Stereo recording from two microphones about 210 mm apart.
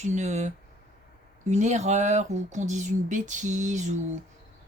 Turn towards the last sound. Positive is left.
turn(degrees=-35)  # may be behind; listen again after turning